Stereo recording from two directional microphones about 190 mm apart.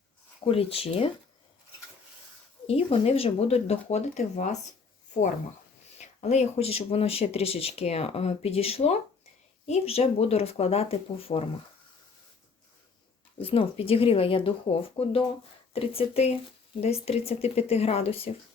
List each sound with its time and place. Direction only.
0.4 s speech: 30° left (ahead or behind)
2.6 s speech: 30° left (ahead or behind)
6.2 s speech: 35° left (ahead or behind)
13.4 s speech: 30° left (ahead or behind)